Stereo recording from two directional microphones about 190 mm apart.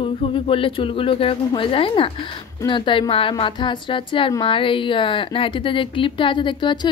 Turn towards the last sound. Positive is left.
turn(degrees=25)  # may be behind; listen again after turning